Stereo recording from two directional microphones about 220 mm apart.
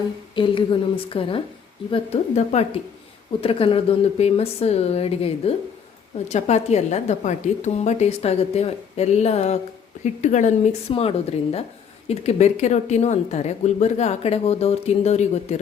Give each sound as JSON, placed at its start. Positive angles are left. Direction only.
{"t": 0.3, "sound": "a woman's voice", "side_deg": 20}